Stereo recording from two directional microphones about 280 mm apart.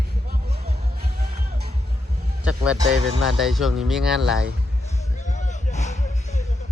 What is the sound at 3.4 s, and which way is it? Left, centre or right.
Speech, centre.